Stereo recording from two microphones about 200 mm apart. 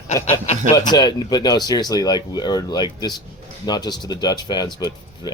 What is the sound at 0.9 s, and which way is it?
Speech, 20° left (ahead or behind).